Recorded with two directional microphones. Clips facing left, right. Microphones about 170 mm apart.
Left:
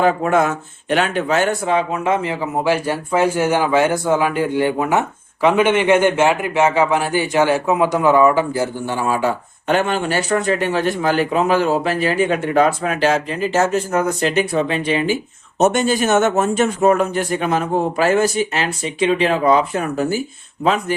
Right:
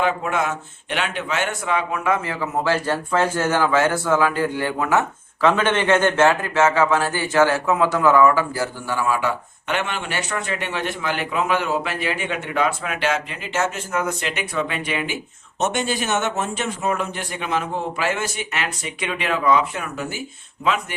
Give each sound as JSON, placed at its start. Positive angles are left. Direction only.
{"t": 0.0, "sound": "speech", "side_deg": 40}